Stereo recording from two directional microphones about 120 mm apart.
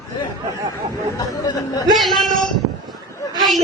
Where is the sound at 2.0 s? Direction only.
Centre (ahead or behind).